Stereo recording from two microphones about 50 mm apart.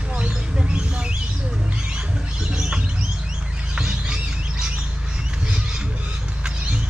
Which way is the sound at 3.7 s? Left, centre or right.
Centre.